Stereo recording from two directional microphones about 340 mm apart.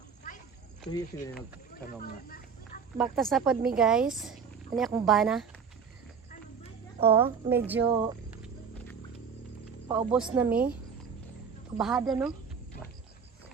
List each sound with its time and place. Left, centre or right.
0.9 s speech: centre
1.4 s a sound: left
3.0 s speech: centre
7.0 s speech: centre
8.4 s horse: centre
9.9 s speech: centre
11.8 s speech: centre